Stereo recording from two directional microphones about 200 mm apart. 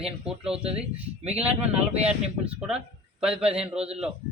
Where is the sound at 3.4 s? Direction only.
30° right (ahead or behind).